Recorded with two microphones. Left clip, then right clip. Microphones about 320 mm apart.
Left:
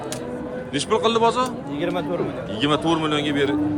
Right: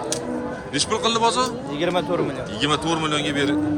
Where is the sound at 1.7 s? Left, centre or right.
Right.